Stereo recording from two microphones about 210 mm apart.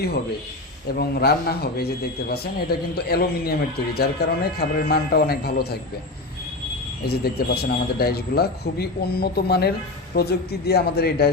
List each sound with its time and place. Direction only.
0.9 s speech: 50° left (ahead or behind)
7.0 s speech: 50° left (ahead or behind)